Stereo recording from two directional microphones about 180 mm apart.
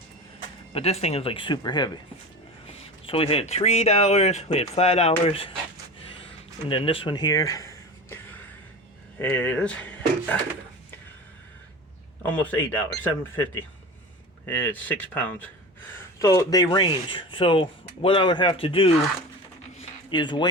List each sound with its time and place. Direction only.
0.7 s speech: 35° left (ahead or behind)
6.7 s speech: 30° left (ahead or behind); by 10.3 s 10° left (ahead or behind)
12.2 s speech: 10° left (ahead or behind); by 18.9 s 30° left (ahead or behind)
20.1 s speech: 25° left (ahead or behind)